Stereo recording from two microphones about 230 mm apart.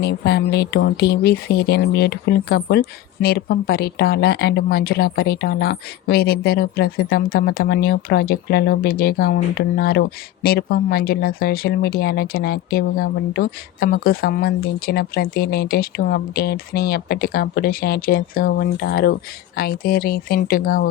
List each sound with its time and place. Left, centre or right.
0.0 s speech: left